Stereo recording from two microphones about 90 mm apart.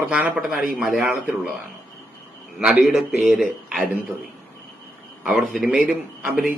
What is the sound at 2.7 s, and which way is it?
A man's voice, 5° right (ahead or behind).